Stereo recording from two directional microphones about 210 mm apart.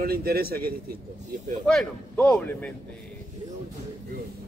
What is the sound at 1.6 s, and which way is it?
Speech, centre (ahead or behind).